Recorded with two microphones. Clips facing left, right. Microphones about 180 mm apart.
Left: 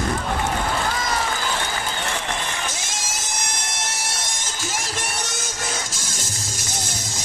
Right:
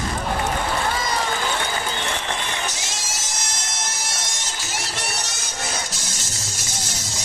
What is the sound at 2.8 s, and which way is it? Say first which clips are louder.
Music: left 1 dB; 55° left (ahead or behind).